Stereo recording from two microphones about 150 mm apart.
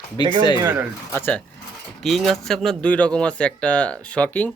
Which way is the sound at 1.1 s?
10° left (ahead or behind).